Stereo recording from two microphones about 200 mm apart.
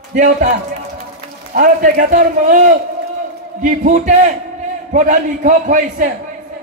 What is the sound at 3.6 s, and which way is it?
A man's voice, 40° right (ahead or behind).